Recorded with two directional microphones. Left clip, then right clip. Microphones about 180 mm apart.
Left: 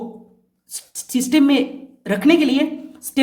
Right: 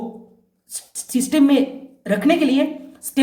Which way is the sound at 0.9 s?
30° left (ahead or behind).